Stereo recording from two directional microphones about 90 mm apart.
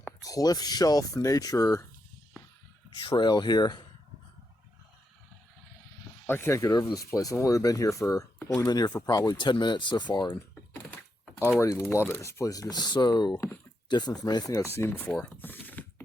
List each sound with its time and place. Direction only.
0.2 s speech: 40° left (ahead or behind)
3.0 s speech: 60° left (ahead or behind)
6.2 s speech: 25° left (ahead or behind); by 14.4 s 50° left (ahead or behind)
14.5 s speech: 30° left (ahead or behind)